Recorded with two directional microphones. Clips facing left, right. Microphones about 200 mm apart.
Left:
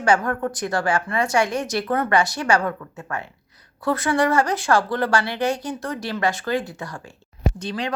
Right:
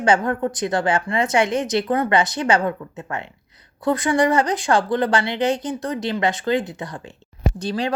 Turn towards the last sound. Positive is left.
turn(degrees=-35)  # may be behind; listen again after turning